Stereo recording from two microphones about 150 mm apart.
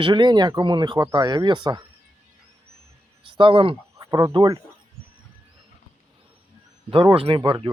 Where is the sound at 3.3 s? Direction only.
35° right (ahead or behind).